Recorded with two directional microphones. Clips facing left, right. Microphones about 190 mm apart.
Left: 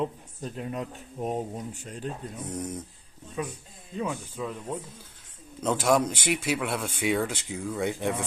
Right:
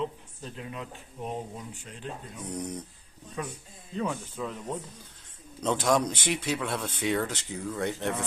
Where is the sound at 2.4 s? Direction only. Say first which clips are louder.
Even; 5° left (ahead or behind).